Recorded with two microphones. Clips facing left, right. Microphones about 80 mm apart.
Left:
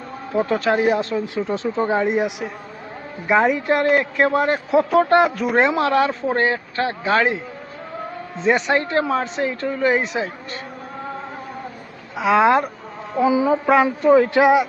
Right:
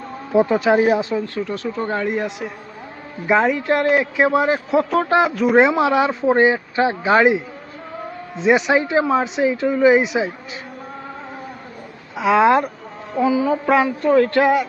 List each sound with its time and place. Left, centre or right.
0.3 s a man's voice: centre
1.5 s a man's voice: left
3.2 s a man's voice: centre
8.4 s a man's voice: centre
12.1 s a man's voice: centre
13.2 s speech: centre
13.5 s a man's voice: centre
13.8 s a man's voice: centre